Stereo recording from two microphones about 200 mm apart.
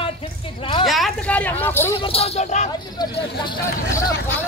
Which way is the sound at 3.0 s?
20° left (ahead or behind).